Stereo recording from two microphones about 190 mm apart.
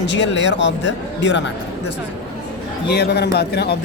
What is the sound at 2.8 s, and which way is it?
Speech, 60° left (ahead or behind).